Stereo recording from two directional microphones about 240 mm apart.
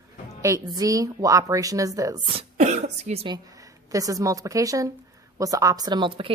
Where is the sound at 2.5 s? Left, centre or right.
Right.